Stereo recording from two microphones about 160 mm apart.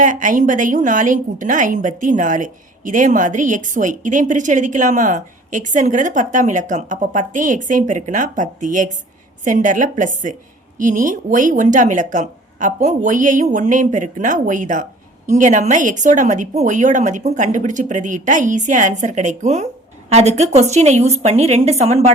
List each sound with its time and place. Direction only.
0.0 s a woman's voice: 55° right (ahead or behind)